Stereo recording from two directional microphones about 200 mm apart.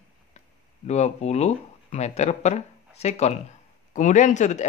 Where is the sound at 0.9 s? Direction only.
35° left (ahead or behind).